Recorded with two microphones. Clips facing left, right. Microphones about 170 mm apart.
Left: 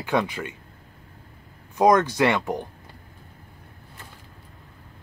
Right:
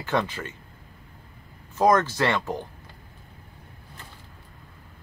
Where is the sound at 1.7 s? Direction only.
15° left (ahead or behind).